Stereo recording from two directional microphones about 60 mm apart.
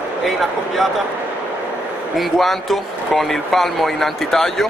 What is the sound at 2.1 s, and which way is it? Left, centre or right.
Speech, centre.